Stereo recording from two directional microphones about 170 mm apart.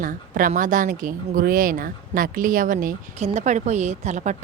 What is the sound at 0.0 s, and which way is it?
A woman's voice, 55° right (ahead or behind).